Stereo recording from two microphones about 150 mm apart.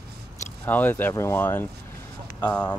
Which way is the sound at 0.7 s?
10° left (ahead or behind).